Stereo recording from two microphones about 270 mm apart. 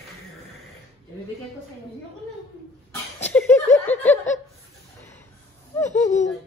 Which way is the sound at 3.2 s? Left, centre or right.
Centre.